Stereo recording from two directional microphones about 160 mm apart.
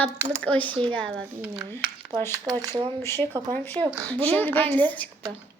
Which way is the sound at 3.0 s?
15° left (ahead or behind).